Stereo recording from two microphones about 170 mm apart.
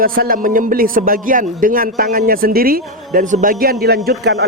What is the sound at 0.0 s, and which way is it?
A man's voice, 60° right (ahead or behind).